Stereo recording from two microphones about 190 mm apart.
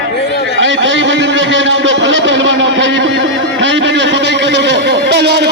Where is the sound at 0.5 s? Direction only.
75° right (ahead or behind).